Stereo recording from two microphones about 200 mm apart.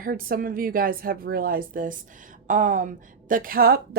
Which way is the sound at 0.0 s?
45° right (ahead or behind).